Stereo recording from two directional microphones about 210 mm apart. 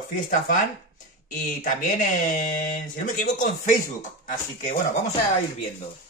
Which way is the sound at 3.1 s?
35° left (ahead or behind).